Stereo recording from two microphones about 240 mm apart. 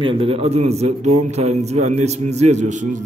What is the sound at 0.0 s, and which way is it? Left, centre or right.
A man's voice, right.